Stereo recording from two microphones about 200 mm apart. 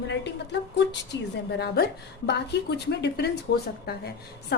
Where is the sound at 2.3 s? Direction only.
55° left (ahead or behind).